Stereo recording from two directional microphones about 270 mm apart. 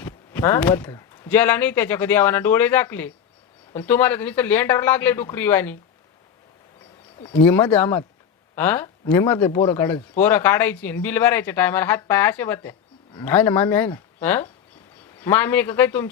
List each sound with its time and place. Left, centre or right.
0.0 s speech: centre
7.2 s speech: centre
7.4 s speech: centre